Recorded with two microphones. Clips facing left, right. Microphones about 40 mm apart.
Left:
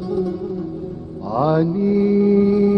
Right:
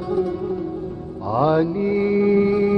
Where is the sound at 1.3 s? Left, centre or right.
Right.